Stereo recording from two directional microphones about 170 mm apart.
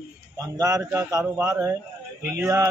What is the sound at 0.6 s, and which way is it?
A man's voice, 20° right (ahead or behind).